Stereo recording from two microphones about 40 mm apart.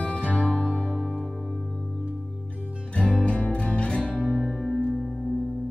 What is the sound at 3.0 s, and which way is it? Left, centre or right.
Music, left.